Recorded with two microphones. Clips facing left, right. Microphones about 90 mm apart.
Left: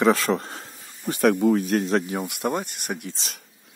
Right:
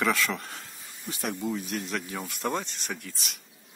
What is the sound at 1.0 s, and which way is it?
Speech, 55° left (ahead or behind).